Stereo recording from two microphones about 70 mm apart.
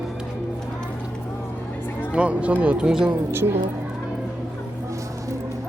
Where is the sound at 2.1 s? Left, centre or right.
Centre.